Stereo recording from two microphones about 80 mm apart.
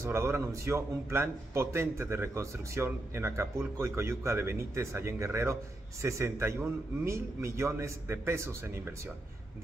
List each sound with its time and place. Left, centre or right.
0.0 s a man's voice: right